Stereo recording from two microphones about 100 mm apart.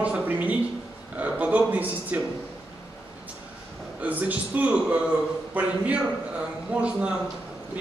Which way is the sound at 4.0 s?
15° right (ahead or behind).